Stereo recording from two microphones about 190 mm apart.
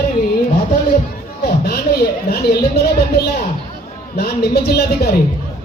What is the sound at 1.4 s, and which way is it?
Speech, 55° left (ahead or behind).